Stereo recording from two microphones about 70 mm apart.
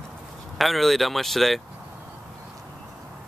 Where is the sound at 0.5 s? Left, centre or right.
Centre.